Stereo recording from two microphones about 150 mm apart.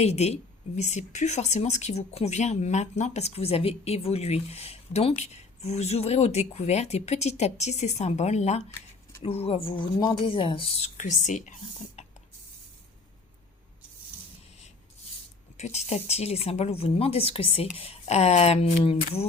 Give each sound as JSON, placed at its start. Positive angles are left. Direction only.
{"t": 0.0, "sound": "a woman's voice", "side_deg": 45}
{"t": 12.0, "sound": "a sound", "side_deg": 50}
{"t": 15.5, "sound": "speech", "side_deg": 50}